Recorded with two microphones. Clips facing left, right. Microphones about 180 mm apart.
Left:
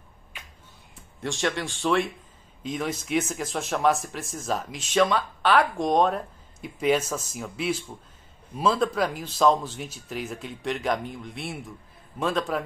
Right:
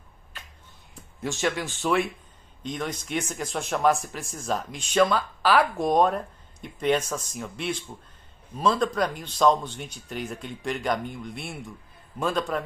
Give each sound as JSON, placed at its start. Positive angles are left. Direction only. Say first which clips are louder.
{"t": 1.2, "sound": "speech", "louder": "even", "side_deg": -5}